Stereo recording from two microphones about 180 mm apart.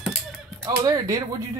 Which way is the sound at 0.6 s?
20° right (ahead or behind).